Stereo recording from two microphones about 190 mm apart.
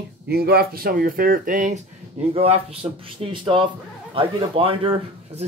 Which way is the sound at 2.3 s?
35° right (ahead or behind).